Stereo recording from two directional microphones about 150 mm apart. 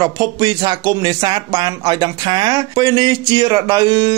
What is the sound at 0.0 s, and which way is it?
Speech, 30° right (ahead or behind).